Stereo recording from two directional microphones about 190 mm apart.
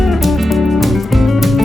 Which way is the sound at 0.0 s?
Centre (ahead or behind).